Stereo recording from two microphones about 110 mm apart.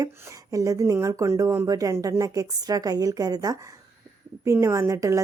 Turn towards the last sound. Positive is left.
turn(degrees=-30)  # may be behind; listen again after turning